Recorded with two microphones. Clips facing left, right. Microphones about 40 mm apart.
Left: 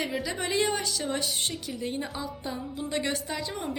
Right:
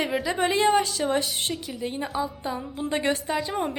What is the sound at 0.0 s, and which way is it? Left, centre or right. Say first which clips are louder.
Speech: right 5 dB; centre.